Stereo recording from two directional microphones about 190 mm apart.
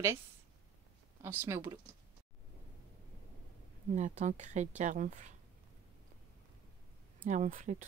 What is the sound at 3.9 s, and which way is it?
Speech, 40° right (ahead or behind).